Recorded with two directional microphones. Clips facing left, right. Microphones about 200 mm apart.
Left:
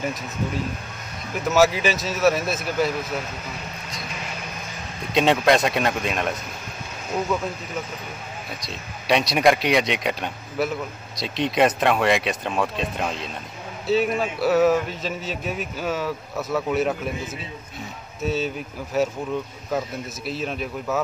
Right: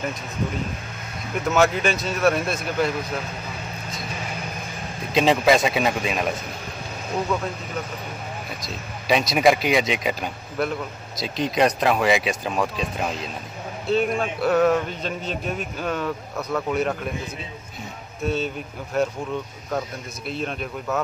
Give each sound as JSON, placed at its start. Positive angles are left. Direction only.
{"t": 1.5, "sound": "a man's voice", "side_deg": 5}
{"t": 5.1, "sound": "a man's voice", "side_deg": 0}
{"t": 8.5, "sound": "a man's voice", "side_deg": 0}
{"t": 18.2, "sound": "a man's voice", "side_deg": 0}
{"t": 20.2, "sound": "a man's voice", "side_deg": 0}